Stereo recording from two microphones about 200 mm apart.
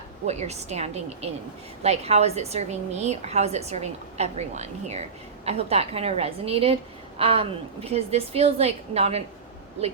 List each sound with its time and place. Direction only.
0.3 s a woman's voice: 35° right (ahead or behind)